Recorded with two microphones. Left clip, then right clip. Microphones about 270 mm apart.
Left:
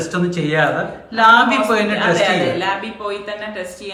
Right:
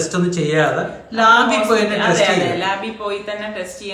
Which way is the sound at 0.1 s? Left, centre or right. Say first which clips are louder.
Right 1 dB; centre.